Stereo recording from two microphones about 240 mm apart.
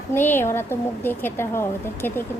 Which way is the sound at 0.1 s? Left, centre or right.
Centre.